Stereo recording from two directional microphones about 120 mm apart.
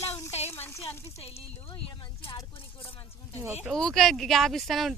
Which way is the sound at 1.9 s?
45° left (ahead or behind).